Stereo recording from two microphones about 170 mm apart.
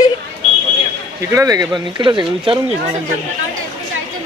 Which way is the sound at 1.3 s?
20° right (ahead or behind).